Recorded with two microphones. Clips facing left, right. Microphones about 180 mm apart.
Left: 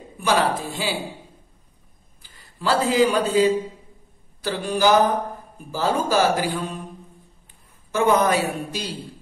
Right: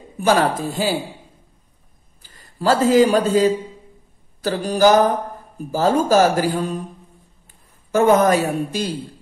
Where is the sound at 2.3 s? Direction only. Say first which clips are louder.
Right 4 dB; 45° right (ahead or behind).